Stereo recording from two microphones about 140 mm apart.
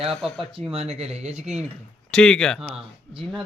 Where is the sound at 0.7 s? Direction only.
50° right (ahead or behind).